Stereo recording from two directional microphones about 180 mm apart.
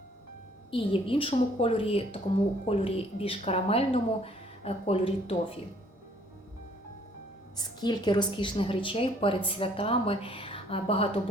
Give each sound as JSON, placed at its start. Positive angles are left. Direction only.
{"t": 0.7, "sound": "a woman's voice", "side_deg": 30}
{"t": 7.5, "sound": "a woman's voice", "side_deg": 25}